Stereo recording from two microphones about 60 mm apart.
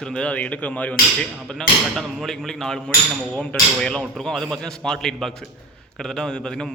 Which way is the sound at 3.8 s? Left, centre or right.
Centre.